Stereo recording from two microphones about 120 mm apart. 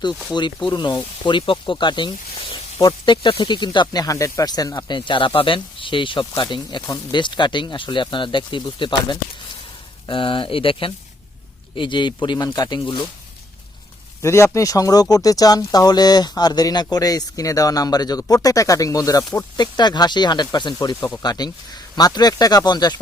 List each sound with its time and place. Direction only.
0.7 s speech: 40° left (ahead or behind)
14.2 s speech: 25° left (ahead or behind)